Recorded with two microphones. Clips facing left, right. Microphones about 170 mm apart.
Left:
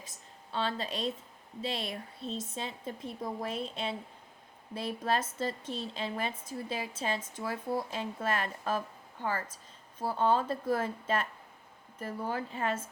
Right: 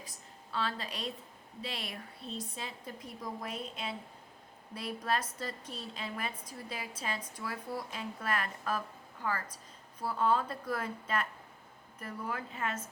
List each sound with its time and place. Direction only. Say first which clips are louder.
0.0 s a woman's voice: even; 25° left (ahead or behind)